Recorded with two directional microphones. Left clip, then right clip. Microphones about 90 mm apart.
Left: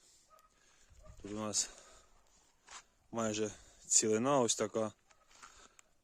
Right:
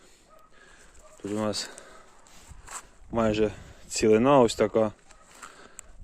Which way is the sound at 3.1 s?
30° left (ahead or behind).